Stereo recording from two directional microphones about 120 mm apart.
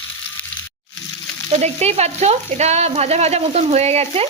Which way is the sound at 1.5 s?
65° right (ahead or behind).